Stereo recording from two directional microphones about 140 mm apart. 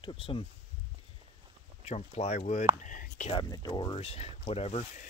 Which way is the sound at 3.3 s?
30° left (ahead or behind).